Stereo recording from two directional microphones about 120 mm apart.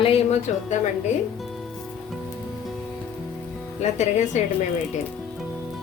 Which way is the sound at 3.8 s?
70° left (ahead or behind).